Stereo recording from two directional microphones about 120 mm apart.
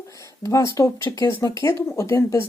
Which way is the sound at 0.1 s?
25° left (ahead or behind).